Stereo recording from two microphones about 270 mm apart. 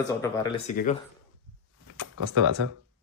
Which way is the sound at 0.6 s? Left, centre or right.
Left.